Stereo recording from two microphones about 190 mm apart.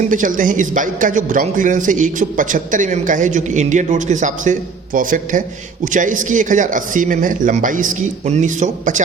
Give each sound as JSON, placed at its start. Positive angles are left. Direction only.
{"t": 0.1, "sound": "speech", "side_deg": -45}